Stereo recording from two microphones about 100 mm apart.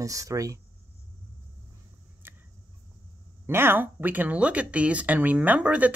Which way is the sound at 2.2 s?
20° right (ahead or behind).